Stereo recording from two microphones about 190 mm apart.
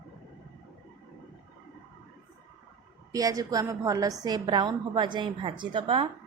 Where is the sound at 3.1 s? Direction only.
20° right (ahead or behind).